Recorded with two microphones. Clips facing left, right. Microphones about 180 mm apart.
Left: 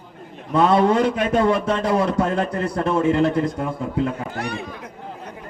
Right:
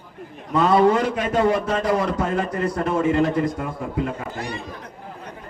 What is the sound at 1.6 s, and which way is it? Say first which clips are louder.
Speech: left 1 dB; 30° left (ahead or behind).